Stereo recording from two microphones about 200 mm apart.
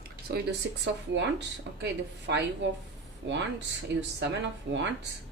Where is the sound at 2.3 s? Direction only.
65° right (ahead or behind).